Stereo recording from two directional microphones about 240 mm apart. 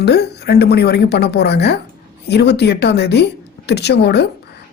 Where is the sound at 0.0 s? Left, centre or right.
Left.